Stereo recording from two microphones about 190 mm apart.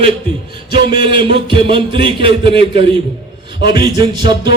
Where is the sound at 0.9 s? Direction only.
25° right (ahead or behind).